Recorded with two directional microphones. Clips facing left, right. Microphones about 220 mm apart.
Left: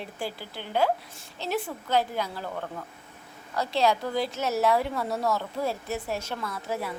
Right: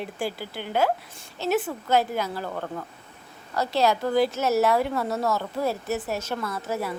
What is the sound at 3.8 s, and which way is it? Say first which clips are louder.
Speech: right 4 dB; 5° right (ahead or behind).